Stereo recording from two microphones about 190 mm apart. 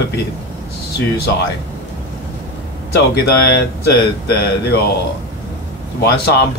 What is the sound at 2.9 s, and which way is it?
Speech, 60° left (ahead or behind).